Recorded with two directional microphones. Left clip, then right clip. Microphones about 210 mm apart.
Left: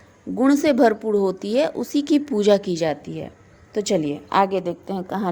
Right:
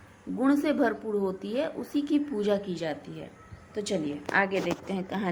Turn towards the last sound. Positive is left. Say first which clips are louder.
# left 5 dB
turn(degrees=15)  # may be behind; listen again after turning